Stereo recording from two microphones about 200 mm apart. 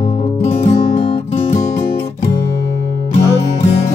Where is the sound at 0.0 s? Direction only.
35° left (ahead or behind).